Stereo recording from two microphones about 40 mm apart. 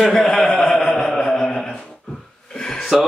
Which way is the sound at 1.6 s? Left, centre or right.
Centre.